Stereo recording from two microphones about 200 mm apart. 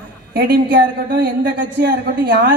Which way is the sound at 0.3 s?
50° right (ahead or behind).